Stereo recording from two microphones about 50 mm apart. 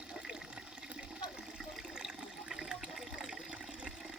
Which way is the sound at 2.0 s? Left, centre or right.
Centre.